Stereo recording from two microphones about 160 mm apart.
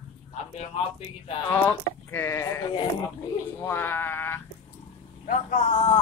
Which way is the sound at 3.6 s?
10° left (ahead or behind).